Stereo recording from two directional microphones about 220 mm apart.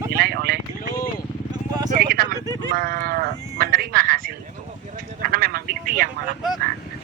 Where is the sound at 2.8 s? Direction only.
45° right (ahead or behind).